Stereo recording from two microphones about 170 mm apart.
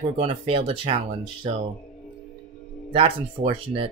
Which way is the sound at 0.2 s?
35° right (ahead or behind).